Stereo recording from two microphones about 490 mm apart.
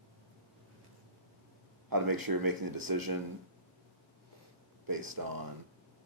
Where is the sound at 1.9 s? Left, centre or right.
Right.